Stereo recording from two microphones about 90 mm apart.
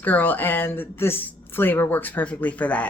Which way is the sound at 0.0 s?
20° left (ahead or behind).